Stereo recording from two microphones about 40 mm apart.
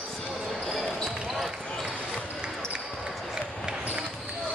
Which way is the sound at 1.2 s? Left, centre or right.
Centre.